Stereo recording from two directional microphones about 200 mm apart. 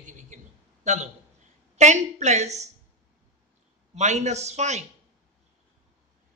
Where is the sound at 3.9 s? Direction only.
35° right (ahead or behind).